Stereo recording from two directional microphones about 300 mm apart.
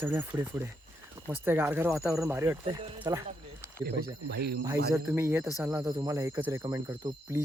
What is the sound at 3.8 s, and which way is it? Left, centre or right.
Speech, right.